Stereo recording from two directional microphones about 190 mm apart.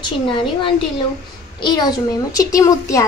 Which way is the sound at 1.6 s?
20° left (ahead or behind).